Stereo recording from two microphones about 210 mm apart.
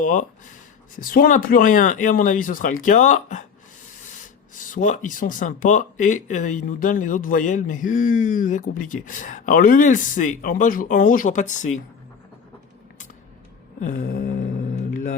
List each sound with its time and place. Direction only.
0.0 s speech: 40° left (ahead or behind)
4.5 s speech: 40° left (ahead or behind)
13.8 s a sound: 40° left (ahead or behind)